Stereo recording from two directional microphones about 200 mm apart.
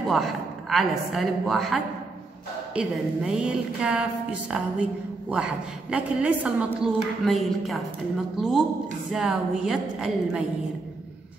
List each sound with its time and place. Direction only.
0.0 s a woman's voice: centre (ahead or behind)
9.1 s a woman's voice: centre (ahead or behind)